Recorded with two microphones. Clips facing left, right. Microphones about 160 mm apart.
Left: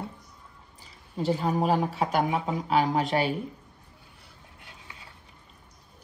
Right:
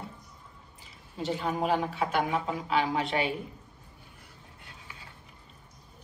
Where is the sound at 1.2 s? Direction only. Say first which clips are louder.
Left 4 dB; 35° left (ahead or behind).